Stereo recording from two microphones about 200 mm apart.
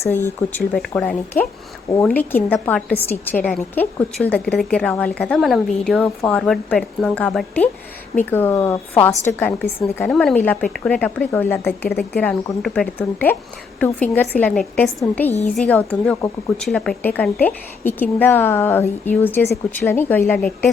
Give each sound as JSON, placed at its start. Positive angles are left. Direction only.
{"t": 0.0, "sound": "a woman's voice", "side_deg": 10}
{"t": 11.9, "sound": "a woman's voice", "side_deg": 50}
{"t": 12.2, "sound": "a woman's voice", "side_deg": 5}